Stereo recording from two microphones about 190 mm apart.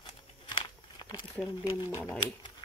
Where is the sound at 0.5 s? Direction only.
20° left (ahead or behind).